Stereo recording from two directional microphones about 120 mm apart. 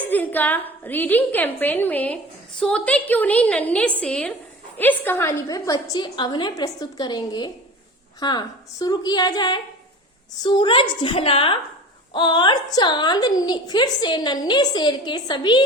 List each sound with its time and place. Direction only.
0.0 s a woman's voice: 15° left (ahead or behind)
5.5 s a woman's voice: 30° left (ahead or behind)